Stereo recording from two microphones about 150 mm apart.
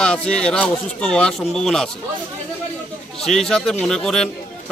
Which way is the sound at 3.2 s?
5° left (ahead or behind).